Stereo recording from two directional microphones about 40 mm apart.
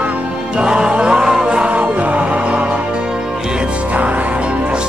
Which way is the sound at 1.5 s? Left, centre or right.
Right.